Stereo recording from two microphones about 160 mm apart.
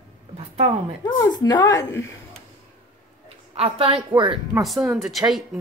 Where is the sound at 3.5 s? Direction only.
40° right (ahead or behind).